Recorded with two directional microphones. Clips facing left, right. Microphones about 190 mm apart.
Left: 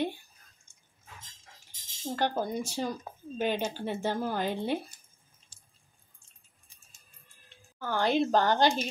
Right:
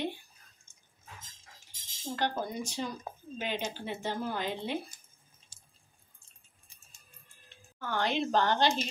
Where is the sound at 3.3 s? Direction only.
45° left (ahead or behind).